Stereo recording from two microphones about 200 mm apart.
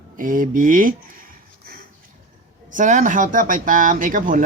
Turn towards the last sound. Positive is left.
turn(degrees=-40)  # may be behind; listen again after turning